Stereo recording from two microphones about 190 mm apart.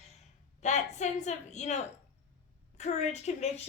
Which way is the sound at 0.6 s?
40° left (ahead or behind).